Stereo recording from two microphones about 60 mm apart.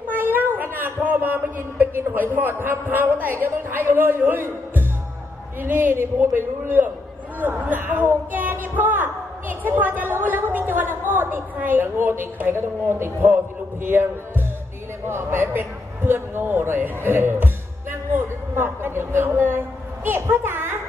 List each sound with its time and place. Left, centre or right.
0.1 s a sound: right
5.6 s a man's voice: right
15.0 s a man's voice: right